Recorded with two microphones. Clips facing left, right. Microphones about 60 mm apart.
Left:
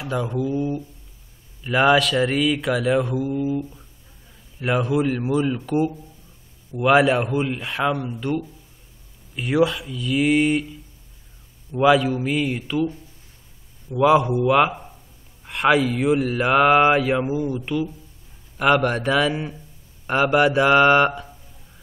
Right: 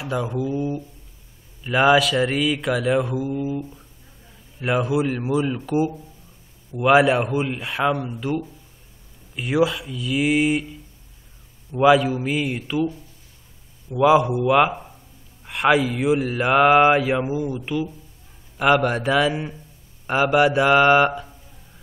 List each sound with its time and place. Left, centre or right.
0.0 s mantra: centre
6.8 s mantra: centre
9.3 s mantra: centre
11.8 s mantra: centre
13.9 s mantra: centre